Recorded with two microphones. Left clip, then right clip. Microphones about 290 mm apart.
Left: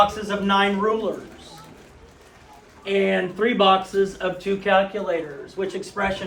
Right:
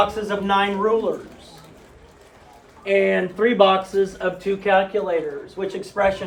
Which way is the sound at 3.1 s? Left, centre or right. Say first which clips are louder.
Right 2 dB; right.